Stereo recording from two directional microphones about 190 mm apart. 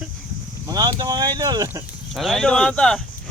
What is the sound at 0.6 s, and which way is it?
Speech, 20° right (ahead or behind).